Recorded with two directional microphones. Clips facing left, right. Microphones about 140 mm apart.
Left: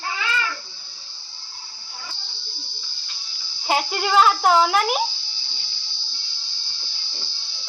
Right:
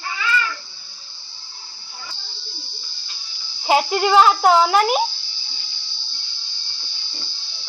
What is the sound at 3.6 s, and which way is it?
A child's voice, 5° right (ahead or behind).